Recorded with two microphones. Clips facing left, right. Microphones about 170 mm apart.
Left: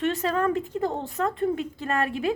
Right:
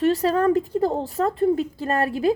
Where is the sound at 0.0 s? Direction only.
35° right (ahead or behind).